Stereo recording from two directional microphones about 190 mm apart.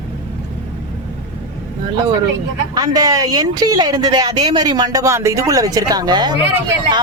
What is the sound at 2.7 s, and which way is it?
Speech, 20° right (ahead or behind).